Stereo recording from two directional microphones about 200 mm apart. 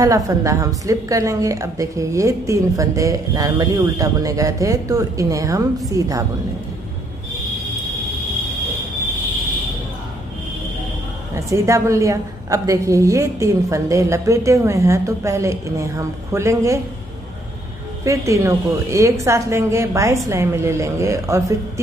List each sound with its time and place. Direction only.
0.0 s a woman's voice: 15° right (ahead or behind)
11.3 s a woman's voice: 15° right (ahead or behind)
18.0 s a woman's voice: 15° right (ahead or behind)